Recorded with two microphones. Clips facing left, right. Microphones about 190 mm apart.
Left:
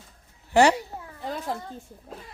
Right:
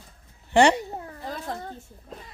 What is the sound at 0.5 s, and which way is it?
Speech, 5° left (ahead or behind).